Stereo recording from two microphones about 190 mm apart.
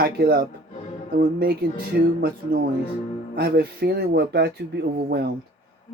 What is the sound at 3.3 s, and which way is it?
Speech, 55° right (ahead or behind).